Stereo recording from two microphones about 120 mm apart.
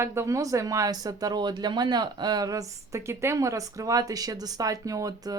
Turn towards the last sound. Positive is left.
turn(degrees=-30)  # may be behind; listen again after turning